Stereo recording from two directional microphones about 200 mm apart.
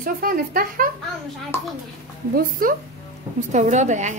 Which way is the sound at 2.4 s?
45° right (ahead or behind).